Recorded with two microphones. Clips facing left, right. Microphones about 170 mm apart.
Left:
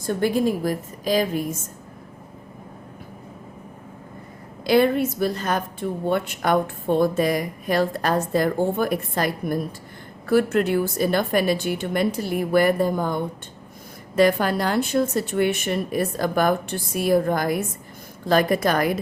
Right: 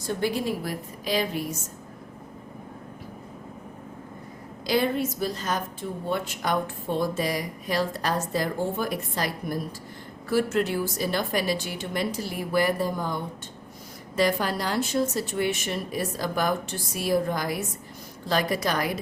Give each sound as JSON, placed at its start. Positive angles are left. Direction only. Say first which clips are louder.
{"t": 0.0, "sound": "a woman's voice", "louder": "left 6 dB", "side_deg": 50}
{"t": 4.6, "sound": "a woman's voice", "louder": "left 6 dB", "side_deg": 60}